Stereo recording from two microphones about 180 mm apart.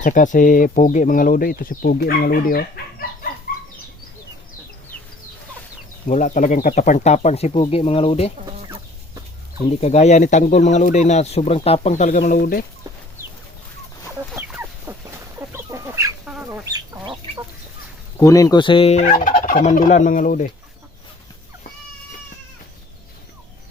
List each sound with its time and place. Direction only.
0.0 s speech: 45° left (ahead or behind)
3.5 s bird: 55° left (ahead or behind)
6.1 s speech: 45° left (ahead or behind)
9.6 s speech: 40° left (ahead or behind)
14.3 s chicken: 10° right (ahead or behind)
18.2 s speech: 20° left (ahead or behind); by 20.5 s 45° left (ahead or behind)